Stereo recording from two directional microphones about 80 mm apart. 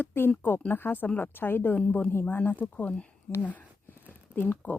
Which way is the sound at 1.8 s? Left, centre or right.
Centre.